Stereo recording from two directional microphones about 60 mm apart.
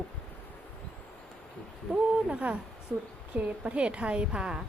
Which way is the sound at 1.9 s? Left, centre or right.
Right.